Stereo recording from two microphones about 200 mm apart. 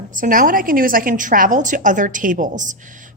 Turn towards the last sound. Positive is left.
turn(degrees=-40)  # may be behind; listen again after turning